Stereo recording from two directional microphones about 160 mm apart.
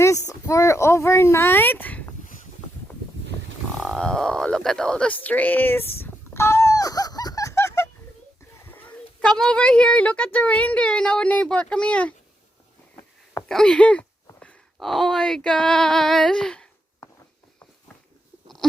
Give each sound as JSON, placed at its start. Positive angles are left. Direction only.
{"t": 0.3, "sound": "speech", "side_deg": 20}
{"t": 3.8, "sound": "a sound", "side_deg": 0}
{"t": 9.4, "sound": "speech", "side_deg": 5}
{"t": 13.5, "sound": "speech", "side_deg": 5}